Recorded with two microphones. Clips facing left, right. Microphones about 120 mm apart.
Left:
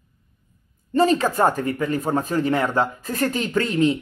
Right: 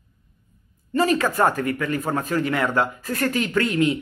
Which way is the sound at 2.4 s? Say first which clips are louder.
Left 3 dB; 40° left (ahead or behind).